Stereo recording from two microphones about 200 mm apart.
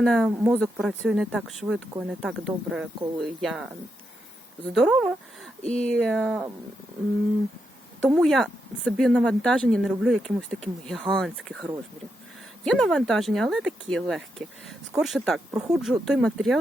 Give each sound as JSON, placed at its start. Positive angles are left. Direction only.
{"t": 0.0, "sound": "speech", "side_deg": 0}
{"t": 0.3, "sound": "speech", "side_deg": -10}
{"t": 0.6, "sound": "speech", "side_deg": 0}
{"t": 8.1, "sound": "speech", "side_deg": 0}